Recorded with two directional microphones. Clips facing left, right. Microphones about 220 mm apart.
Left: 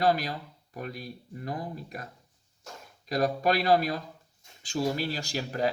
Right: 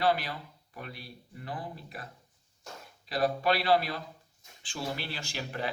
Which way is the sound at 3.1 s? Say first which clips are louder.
Left 2 dB; 45° left (ahead or behind).